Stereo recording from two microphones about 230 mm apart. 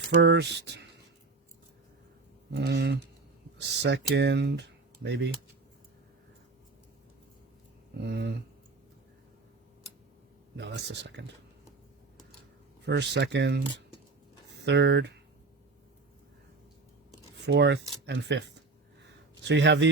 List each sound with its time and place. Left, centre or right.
0.1 s speech: right
2.5 s speech: right
8.0 s speech: right
10.6 s speech: right
12.8 s speech: right
14.6 s speech: right
17.4 s speech: right